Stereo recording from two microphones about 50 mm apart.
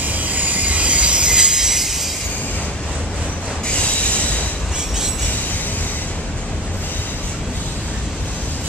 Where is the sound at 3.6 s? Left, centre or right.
Left.